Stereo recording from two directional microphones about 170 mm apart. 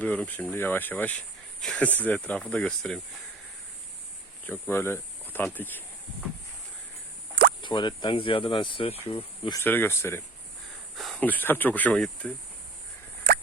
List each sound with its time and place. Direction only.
0.0 s speech: 10° left (ahead or behind)
4.7 s speech: 15° left (ahead or behind)
7.6 s speech: 25° left (ahead or behind)
9.6 s speech: 10° left (ahead or behind)
10.9 s speech: centre (ahead or behind)